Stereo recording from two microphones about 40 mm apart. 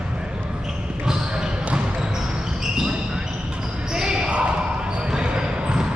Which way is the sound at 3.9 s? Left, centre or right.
Centre.